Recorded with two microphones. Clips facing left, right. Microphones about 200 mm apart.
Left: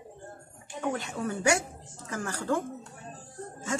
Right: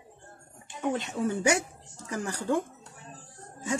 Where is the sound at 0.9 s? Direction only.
20° right (ahead or behind).